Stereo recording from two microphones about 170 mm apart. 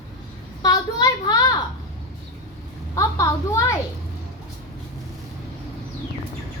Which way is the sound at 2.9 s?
20° left (ahead or behind).